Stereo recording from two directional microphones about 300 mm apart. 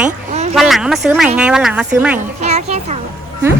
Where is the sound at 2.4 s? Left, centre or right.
Right.